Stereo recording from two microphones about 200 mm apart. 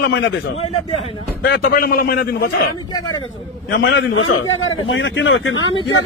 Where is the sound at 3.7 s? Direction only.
55° left (ahead or behind); by 5.6 s 75° left (ahead or behind).